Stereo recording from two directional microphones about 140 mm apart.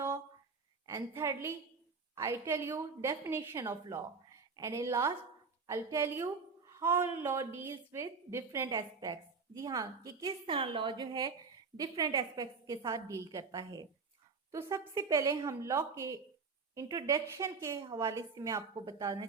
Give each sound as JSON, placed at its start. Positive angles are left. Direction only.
{"t": 0.9, "sound": "a woman's voice", "side_deg": -20}
{"t": 10.4, "sound": "a woman's voice", "side_deg": -35}